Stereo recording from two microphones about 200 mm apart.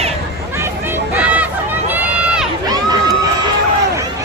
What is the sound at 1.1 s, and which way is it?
Hubbub, 5° right (ahead or behind).